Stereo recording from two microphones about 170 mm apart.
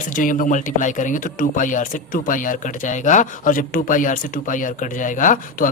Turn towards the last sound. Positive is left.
turn(degrees=50)  # may be behind; listen again after turning